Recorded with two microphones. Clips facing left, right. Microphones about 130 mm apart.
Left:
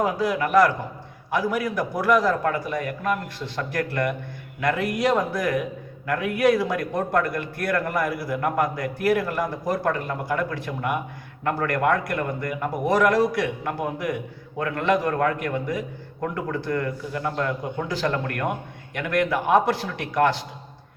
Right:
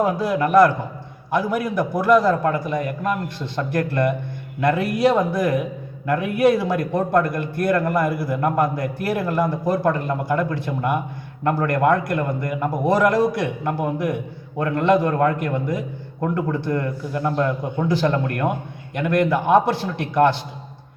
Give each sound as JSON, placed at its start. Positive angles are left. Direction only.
{"t": 0.2, "sound": "a man's voice", "side_deg": -30}
{"t": 5.1, "sound": "a man's voice", "side_deg": -25}